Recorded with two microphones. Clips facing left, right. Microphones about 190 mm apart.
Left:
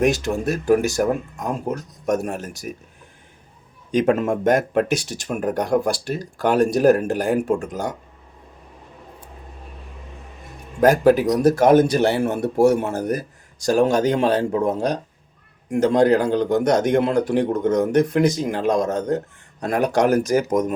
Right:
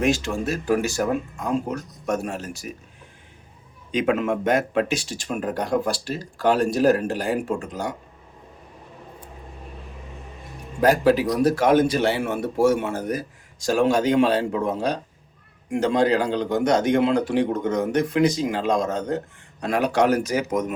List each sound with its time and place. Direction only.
0.1 s speech: 55° left (ahead or behind)
2.1 s speech: 55° left (ahead or behind)
4.0 s a man's voice: 50° left (ahead or behind)
10.8 s a man's voice: 50° left (ahead or behind)